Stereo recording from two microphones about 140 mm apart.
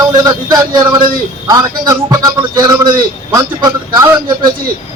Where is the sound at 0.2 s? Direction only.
30° right (ahead or behind).